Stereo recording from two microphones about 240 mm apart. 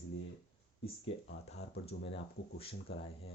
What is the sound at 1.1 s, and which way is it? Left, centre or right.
Speech, left.